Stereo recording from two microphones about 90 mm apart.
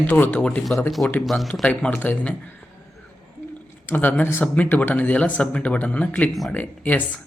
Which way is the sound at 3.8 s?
20° left (ahead or behind).